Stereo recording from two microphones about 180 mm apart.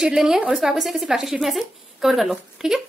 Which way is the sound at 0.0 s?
5° right (ahead or behind).